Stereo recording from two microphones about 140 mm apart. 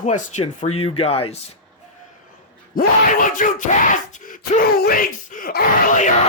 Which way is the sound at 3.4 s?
65° left (ahead or behind).